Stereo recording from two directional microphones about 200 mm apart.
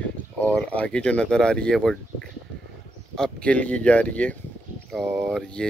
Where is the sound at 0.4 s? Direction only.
5° left (ahead or behind).